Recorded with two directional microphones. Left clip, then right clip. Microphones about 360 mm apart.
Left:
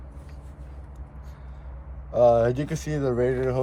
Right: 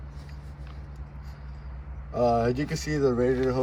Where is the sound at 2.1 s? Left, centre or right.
Left.